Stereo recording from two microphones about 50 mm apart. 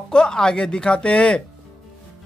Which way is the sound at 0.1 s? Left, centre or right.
Centre.